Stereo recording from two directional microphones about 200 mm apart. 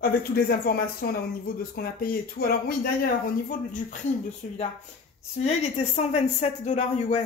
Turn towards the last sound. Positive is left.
turn(degrees=35)  # may be behind; listen again after turning